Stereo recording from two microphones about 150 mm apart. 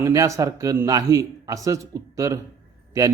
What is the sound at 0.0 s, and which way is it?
A man's voice, 20° right (ahead or behind).